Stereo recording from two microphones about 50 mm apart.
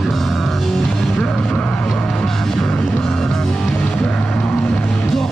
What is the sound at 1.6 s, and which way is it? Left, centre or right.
Vehicle, left.